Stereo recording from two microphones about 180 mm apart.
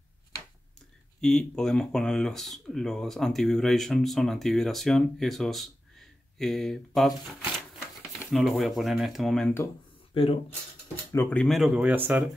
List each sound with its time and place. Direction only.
1.2 s speech: 5° left (ahead or behind)
10.1 s speech: 30° left (ahead or behind)
11.1 s speech: 10° left (ahead or behind); by 12.3 s 10° right (ahead or behind)